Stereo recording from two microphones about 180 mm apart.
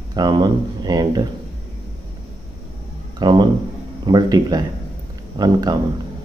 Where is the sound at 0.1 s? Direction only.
25° right (ahead or behind).